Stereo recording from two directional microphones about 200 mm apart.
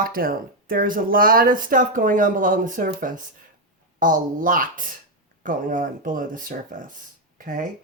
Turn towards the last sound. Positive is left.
turn(degrees=-40)  # may be behind; listen again after turning